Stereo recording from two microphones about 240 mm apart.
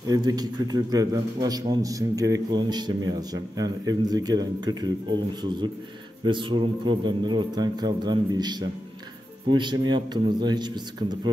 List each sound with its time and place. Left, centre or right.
0.0 s a man's voice: centre